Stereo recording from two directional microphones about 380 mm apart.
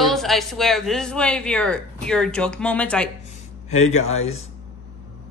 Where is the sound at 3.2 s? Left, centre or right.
Centre.